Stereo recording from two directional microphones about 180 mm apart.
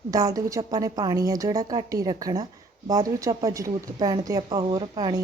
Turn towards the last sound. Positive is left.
turn(degrees=-25)  # may be behind; listen again after turning